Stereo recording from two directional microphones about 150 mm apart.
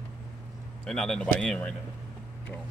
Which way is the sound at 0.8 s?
5° left (ahead or behind).